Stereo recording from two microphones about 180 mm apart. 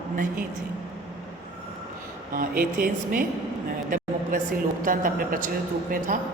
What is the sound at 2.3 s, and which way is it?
Speech, 50° right (ahead or behind).